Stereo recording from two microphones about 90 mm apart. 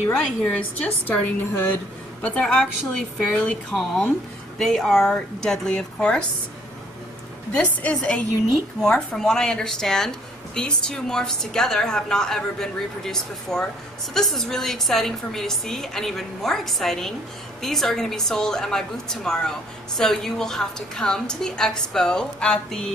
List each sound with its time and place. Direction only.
0.1 s a woman's voice: 15° left (ahead or behind)
7.5 s a woman's voice: 15° left (ahead or behind)